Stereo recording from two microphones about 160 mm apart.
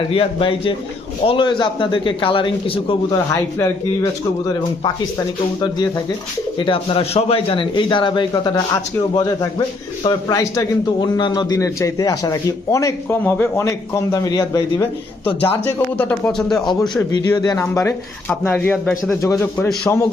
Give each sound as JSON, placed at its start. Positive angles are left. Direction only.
{"t": 0.1, "sound": "a man's voice", "side_deg": 35}
{"t": 3.6, "sound": "a man's voice", "side_deg": 20}
{"t": 15.4, "sound": "speech", "side_deg": 10}
{"t": 17.1, "sound": "a man's voice", "side_deg": 25}
{"t": 18.6, "sound": "speech", "side_deg": 5}
{"t": 19.2, "sound": "a man's voice", "side_deg": 20}